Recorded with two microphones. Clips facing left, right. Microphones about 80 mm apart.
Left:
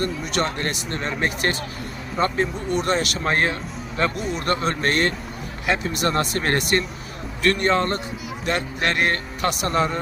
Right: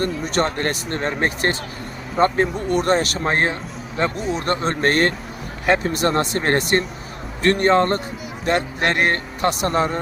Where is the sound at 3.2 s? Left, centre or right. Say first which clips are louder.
Right 2 dB; right.